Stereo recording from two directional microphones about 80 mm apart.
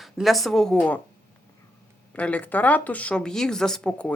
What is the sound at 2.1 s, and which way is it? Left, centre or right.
A woman's voice, centre.